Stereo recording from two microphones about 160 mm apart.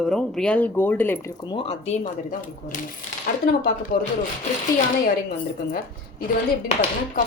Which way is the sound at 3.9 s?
60° left (ahead or behind).